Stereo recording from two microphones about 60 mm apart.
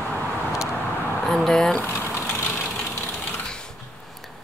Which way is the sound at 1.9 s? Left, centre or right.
Left.